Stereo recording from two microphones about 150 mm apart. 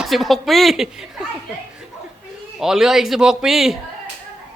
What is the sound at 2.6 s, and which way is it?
A man's voice, 5° right (ahead or behind).